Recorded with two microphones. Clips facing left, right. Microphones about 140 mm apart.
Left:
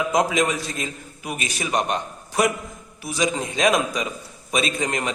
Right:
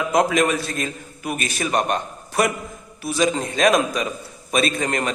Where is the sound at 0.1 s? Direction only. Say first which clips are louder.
Right 5 dB; 15° left (ahead or behind).